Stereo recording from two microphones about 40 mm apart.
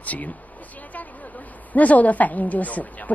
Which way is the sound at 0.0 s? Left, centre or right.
Left.